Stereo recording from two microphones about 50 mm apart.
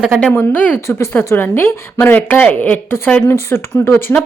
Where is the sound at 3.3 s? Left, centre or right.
Left.